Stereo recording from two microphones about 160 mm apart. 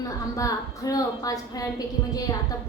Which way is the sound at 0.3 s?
20° left (ahead or behind).